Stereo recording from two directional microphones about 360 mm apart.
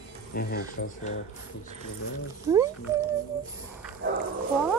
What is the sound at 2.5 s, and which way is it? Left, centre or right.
Speech, centre.